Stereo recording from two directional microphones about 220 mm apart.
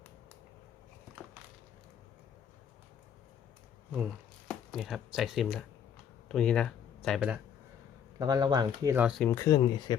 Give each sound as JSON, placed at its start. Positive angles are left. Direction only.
{"t": 3.9, "sound": "speech", "side_deg": -5}
{"t": 8.2, "sound": "speech", "side_deg": -20}
{"t": 9.2, "sound": "speech", "side_deg": 15}